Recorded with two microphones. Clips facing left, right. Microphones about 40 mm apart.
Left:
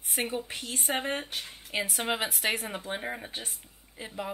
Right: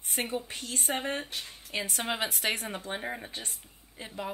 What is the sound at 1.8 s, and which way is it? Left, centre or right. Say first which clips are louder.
Speech: right 1 dB; centre.